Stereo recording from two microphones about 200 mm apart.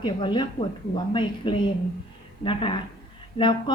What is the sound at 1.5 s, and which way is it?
A woman's voice, 25° left (ahead or behind).